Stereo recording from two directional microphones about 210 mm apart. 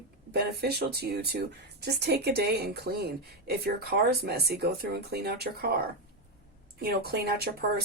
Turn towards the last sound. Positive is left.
turn(degrees=-50)  # may be behind; listen again after turning